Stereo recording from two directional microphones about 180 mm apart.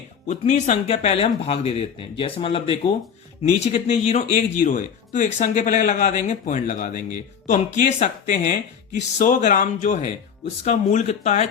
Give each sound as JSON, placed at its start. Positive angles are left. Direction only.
{"t": 0.3, "sound": "speech", "side_deg": 40}